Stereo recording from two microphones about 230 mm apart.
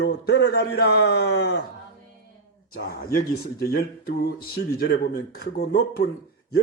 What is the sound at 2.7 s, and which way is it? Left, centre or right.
Speech, left.